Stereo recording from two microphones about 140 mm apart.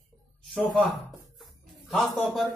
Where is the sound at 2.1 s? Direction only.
Centre (ahead or behind).